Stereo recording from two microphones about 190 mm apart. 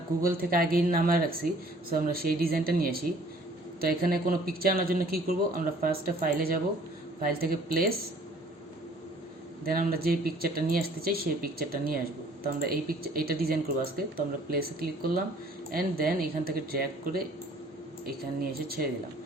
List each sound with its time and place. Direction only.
0.2 s speech: 50° right (ahead or behind)
9.6 s speech: 50° right (ahead or behind)